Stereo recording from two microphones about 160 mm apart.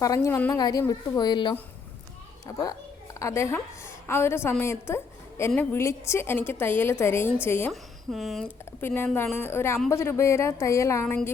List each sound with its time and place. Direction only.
0.0 s speech: 20° left (ahead or behind)
0.5 s a woman's voice: 25° left (ahead or behind)
7.7 s speech: centre (ahead or behind); by 11.0 s 20° left (ahead or behind)
11.0 s a woman's voice: 5° left (ahead or behind)